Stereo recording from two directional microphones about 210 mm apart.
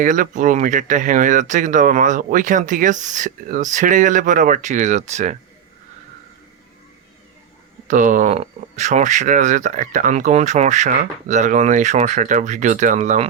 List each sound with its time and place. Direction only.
0.0 s speech: 40° right (ahead or behind)
7.9 s speech: 40° right (ahead or behind)